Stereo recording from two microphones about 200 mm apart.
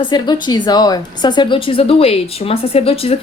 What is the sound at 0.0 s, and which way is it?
A woman's voice, 20° left (ahead or behind).